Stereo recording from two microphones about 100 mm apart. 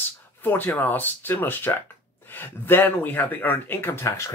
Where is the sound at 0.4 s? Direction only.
20° left (ahead or behind).